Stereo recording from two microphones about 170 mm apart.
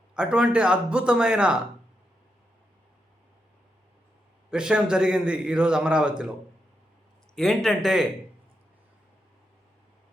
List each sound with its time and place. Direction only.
0.1 s a man's voice: 5° right (ahead or behind)
4.5 s a man's voice: 5° right (ahead or behind)
7.3 s a man's voice: centre (ahead or behind)